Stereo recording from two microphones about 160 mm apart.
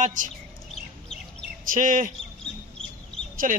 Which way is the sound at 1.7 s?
55° right (ahead or behind).